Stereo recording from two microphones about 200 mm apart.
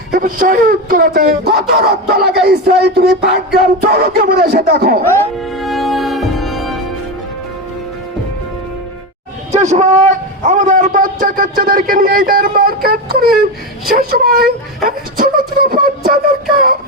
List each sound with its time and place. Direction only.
0.1 s music: 45° right (ahead or behind)
5.5 s music: centre (ahead or behind)
9.5 s a man's voice: 35° right (ahead or behind)
14.8 s a sound: 45° right (ahead or behind)